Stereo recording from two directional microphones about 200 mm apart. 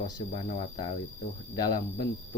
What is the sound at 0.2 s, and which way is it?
Speech, 25° left (ahead or behind).